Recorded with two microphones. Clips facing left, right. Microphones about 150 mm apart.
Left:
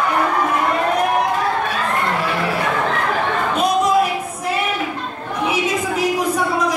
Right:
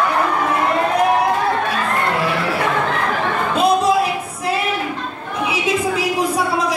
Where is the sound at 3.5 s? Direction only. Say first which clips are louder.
Right 3 dB; 30° right (ahead or behind).